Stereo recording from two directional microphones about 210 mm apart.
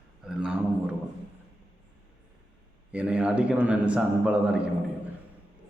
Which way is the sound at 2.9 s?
5° right (ahead or behind).